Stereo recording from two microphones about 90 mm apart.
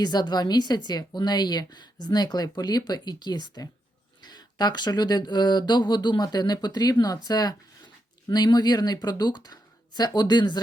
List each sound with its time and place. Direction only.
0.0 s a woman's voice: 50° left (ahead or behind)